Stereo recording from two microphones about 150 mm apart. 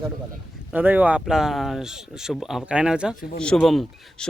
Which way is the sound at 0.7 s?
10° right (ahead or behind).